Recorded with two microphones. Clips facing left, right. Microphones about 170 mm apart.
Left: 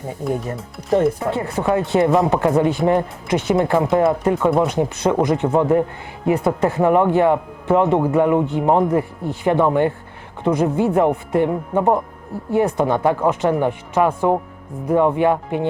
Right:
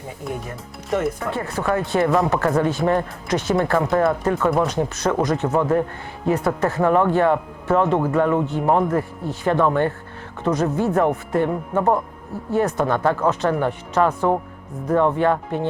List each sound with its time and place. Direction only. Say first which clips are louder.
0.3 s speech: left 7 dB; centre (ahead or behind)
1.2 s speech: left 3 dB; 20° left (ahead or behind)